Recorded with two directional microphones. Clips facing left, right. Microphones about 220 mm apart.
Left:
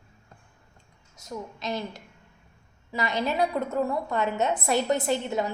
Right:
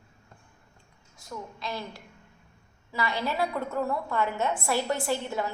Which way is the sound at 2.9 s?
20° left (ahead or behind).